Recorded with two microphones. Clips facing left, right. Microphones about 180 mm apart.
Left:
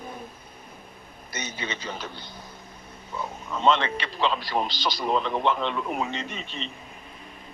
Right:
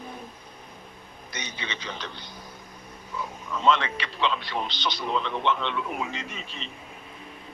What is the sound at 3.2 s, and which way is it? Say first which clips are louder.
A man's voice: left 2 dB; 30° left (ahead or behind).